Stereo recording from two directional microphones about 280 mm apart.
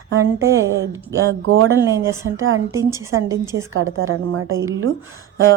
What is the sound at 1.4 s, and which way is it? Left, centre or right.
Speech, right.